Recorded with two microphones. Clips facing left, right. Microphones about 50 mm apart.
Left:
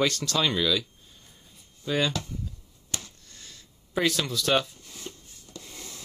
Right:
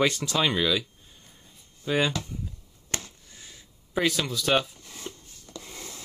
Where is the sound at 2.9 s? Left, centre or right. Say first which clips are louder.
Right 3 dB; right.